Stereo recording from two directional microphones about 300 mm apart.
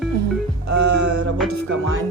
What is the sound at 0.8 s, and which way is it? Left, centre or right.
Speech, right.